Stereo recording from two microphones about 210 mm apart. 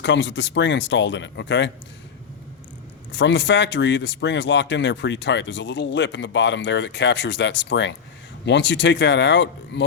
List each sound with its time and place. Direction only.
0.0 s speech: 60° left (ahead or behind)
3.1 s speech: 60° left (ahead or behind)